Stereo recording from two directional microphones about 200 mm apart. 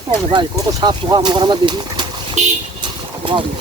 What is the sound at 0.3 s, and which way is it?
Speech, 20° right (ahead or behind).